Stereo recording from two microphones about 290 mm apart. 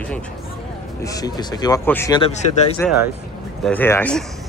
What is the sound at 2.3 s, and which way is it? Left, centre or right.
Speech, left.